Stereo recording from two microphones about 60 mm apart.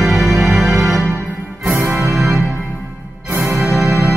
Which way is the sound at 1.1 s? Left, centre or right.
Right.